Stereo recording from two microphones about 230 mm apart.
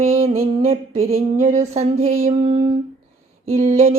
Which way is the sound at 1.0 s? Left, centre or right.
Right.